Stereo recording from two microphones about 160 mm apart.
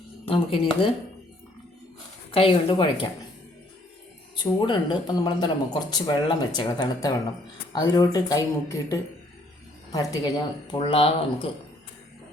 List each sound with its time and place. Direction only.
0.3 s speech: 35° left (ahead or behind)
2.3 s speech: 35° left (ahead or behind)
4.6 s speech: 25° left (ahead or behind)